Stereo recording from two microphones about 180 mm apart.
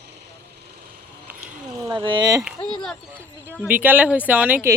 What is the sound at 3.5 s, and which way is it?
Speech, 5° right (ahead or behind).